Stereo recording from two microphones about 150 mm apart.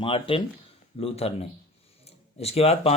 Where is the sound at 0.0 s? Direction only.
35° left (ahead or behind).